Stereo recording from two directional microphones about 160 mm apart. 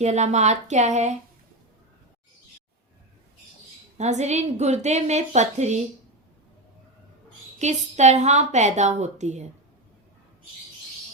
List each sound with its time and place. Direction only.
0.0 s a woman's voice: 45° right (ahead or behind)
3.9 s a woman's voice: 45° right (ahead or behind)
7.6 s a woman's voice: 45° right (ahead or behind)